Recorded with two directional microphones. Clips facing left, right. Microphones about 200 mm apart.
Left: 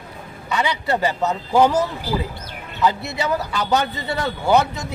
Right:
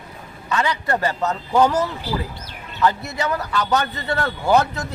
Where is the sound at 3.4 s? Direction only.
10° left (ahead or behind).